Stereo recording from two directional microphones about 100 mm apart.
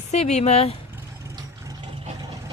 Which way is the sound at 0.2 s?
90° left.